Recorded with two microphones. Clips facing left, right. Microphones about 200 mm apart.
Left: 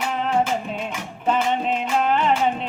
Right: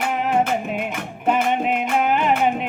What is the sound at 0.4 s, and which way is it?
Music, 60° right (ahead or behind).